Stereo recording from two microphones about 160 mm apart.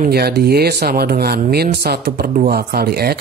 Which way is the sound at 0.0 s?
75° right (ahead or behind).